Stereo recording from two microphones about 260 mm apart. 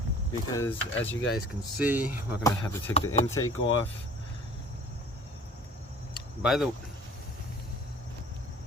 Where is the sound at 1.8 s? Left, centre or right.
Centre.